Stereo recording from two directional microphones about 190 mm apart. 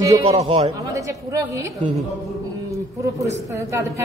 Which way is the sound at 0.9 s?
15° right (ahead or behind).